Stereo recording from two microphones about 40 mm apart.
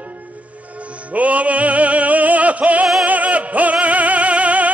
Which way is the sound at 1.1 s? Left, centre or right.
Right.